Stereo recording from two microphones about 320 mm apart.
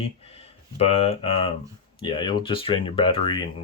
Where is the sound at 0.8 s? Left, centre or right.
Centre.